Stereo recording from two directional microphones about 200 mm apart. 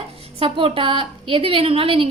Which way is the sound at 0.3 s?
25° right (ahead or behind).